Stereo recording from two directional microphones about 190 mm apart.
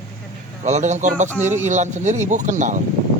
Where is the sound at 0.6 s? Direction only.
40° right (ahead or behind).